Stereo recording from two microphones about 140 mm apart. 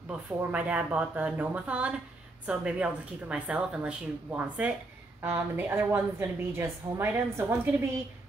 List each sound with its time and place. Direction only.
0.4 s a woman's voice: 10° right (ahead or behind)